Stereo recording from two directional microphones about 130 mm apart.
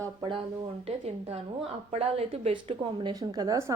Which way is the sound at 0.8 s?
50° right (ahead or behind).